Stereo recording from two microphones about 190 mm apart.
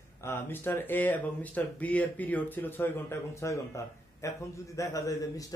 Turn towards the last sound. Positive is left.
turn(degrees=20)  # may be behind; listen again after turning